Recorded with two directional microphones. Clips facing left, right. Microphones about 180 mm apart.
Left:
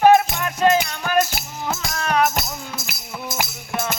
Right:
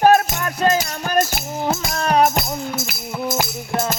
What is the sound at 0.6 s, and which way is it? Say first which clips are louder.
Music: left 1 dB; 40° right (ahead or behind).